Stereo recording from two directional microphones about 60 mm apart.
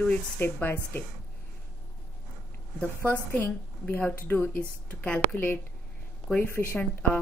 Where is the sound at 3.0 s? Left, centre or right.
Left.